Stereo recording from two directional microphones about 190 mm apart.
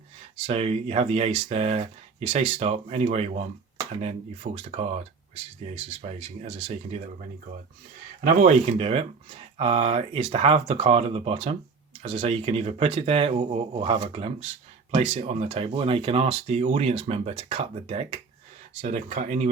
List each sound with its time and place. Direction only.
0.3 s speech: 30° right (ahead or behind)
4.5 s speech: 35° right (ahead or behind)
8.2 s speech: 40° right (ahead or behind)